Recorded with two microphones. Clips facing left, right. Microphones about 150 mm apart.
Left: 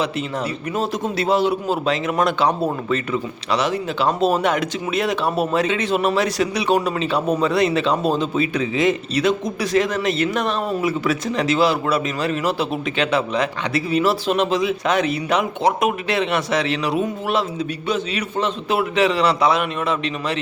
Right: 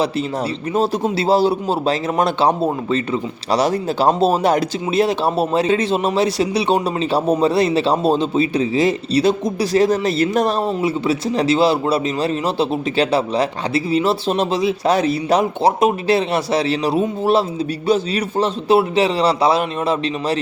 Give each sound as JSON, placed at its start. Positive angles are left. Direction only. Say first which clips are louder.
{"t": 0.7, "sound": "speech", "louder": "right 6 dB", "side_deg": -30}